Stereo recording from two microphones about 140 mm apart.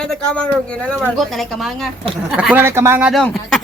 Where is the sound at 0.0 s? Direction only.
5° left (ahead or behind); by 3.1 s 15° right (ahead or behind).